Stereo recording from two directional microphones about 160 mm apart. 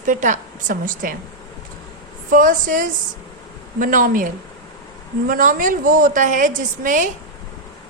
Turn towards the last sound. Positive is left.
turn(degrees=-55)  # may be behind; listen again after turning